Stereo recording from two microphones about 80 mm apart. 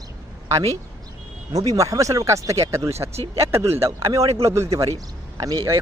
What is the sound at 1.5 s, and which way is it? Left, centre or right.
Speech, right.